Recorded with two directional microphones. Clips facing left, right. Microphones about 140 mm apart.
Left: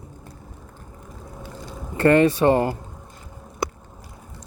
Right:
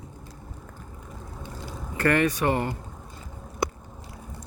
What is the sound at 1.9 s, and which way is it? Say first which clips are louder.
Speech: left 7 dB; 25° left (ahead or behind).